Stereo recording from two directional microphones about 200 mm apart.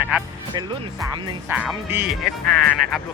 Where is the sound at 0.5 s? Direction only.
20° right (ahead or behind).